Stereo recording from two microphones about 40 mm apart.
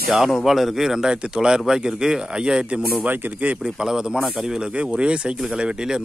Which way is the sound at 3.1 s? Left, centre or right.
Right.